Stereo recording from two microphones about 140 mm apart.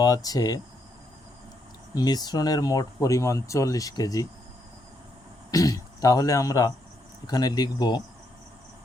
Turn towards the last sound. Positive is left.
turn(degrees=30)  # may be behind; listen again after turning